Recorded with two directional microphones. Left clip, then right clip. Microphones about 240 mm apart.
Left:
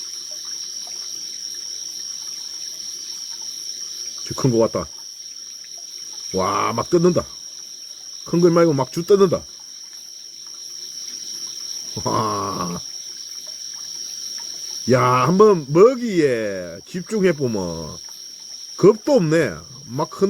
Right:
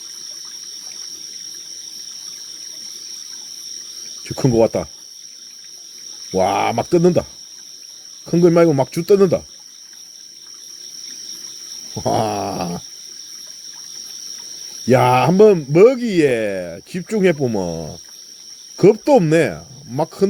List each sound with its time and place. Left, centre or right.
4.2 s speech: centre
6.4 s speech: centre
8.3 s speech: centre
12.1 s groan: right
14.8 s speech: centre
18.8 s speech: centre